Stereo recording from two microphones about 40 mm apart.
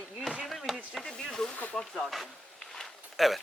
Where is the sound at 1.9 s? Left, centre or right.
Centre.